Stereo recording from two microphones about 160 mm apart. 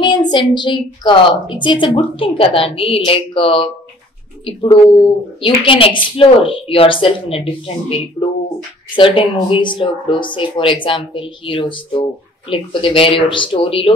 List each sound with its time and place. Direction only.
0.0 s speech: 30° left (ahead or behind)
5.4 s speech: 35° left (ahead or behind)